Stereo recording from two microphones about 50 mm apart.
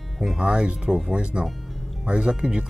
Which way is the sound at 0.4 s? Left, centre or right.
Centre.